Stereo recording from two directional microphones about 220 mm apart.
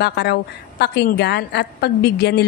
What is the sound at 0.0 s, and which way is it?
Speech, 50° left (ahead or behind).